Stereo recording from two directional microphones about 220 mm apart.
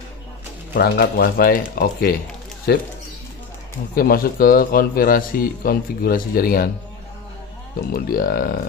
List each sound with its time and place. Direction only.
0.7 s speech: 45° left (ahead or behind)
3.9 s a man's voice: 40° left (ahead or behind)
7.9 s speech: 40° left (ahead or behind)